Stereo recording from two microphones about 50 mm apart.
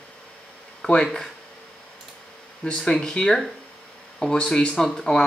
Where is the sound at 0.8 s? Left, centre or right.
Left.